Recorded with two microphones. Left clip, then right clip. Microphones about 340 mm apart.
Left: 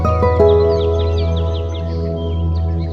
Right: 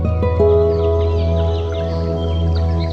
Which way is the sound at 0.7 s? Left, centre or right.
Centre.